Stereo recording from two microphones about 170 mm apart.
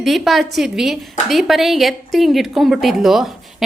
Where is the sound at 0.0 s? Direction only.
Centre (ahead or behind).